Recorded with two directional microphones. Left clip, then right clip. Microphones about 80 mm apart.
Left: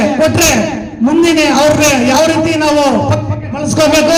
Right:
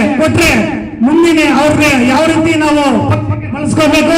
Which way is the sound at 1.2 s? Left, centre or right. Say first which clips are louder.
Right 1 dB; left.